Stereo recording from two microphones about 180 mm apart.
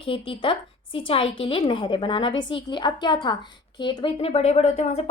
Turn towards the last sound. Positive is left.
turn(degrees=35)  # may be behind; listen again after turning